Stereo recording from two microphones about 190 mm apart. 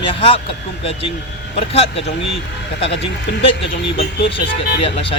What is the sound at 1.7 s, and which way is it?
Speech, 30° left (ahead or behind).